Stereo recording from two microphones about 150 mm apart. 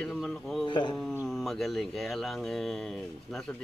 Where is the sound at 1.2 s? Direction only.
Centre (ahead or behind).